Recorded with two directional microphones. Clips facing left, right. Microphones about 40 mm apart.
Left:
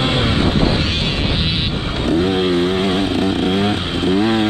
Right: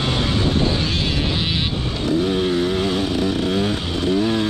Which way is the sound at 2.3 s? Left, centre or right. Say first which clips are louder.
Left 3 dB; left.